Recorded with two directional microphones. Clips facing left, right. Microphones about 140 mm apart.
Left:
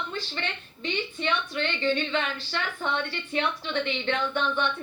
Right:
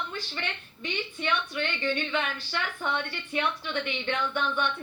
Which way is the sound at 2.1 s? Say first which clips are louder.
Left 1 dB; 10° right (ahead or behind).